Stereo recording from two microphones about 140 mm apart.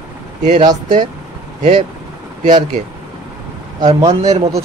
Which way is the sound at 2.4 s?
60° right (ahead or behind).